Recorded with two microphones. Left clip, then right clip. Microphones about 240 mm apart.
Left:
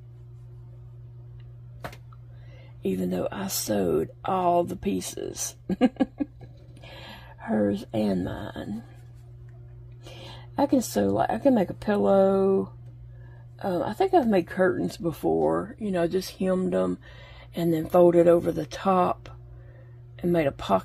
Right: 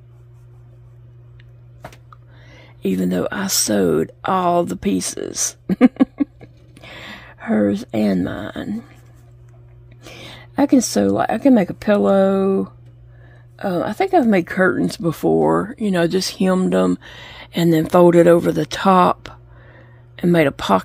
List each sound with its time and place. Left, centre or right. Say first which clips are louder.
2.5 s speech: right 7 dB; right
10.0 s speech: right 7 dB; right